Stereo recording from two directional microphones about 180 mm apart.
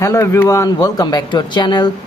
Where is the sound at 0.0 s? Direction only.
15° left (ahead or behind).